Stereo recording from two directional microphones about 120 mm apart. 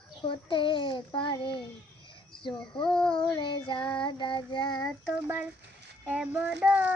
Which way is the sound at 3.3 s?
40° left (ahead or behind).